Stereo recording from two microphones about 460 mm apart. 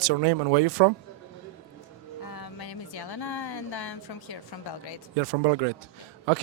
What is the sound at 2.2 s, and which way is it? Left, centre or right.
Music, left.